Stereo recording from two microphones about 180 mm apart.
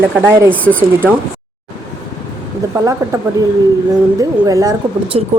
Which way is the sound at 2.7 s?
20° right (ahead or behind).